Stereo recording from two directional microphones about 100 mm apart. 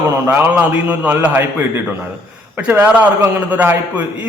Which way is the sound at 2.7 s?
15° right (ahead or behind).